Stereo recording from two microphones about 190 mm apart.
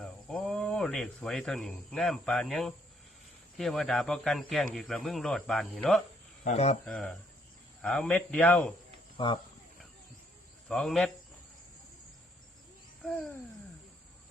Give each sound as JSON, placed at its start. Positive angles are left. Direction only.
{"t": 0.0, "sound": "speech", "side_deg": 5}
{"t": 6.4, "sound": "speech", "side_deg": 35}
{"t": 6.8, "sound": "speech", "side_deg": 5}
{"t": 9.1, "sound": "speech", "side_deg": 25}
{"t": 10.7, "sound": "speech", "side_deg": 0}